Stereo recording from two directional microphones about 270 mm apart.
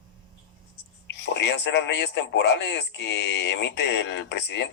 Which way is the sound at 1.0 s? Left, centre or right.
Left.